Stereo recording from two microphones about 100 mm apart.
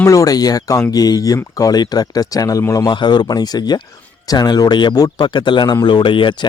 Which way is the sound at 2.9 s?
45° left (ahead or behind).